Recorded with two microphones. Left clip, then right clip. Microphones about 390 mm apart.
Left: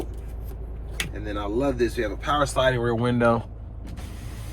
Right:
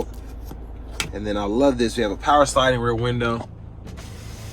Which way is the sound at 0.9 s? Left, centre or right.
Centre.